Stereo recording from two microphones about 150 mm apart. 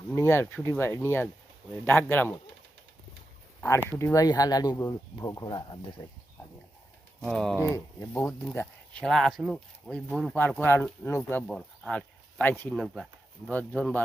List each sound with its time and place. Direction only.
0.1 s speech: 15° left (ahead or behind)
3.8 s speech: 20° left (ahead or behind)
7.3 s speech: centre (ahead or behind)
7.6 s speech: 20° left (ahead or behind)
12.7 s speech: centre (ahead or behind)
13.5 s speech: 10° left (ahead or behind)